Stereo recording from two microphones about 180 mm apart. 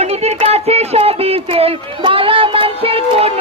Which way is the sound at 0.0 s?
35° right (ahead or behind).